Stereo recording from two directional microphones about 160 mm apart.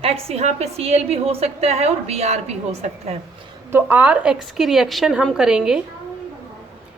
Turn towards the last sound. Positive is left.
turn(degrees=-5)  # may be behind; listen again after turning